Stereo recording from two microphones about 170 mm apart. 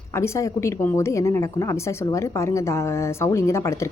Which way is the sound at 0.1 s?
15° left (ahead or behind).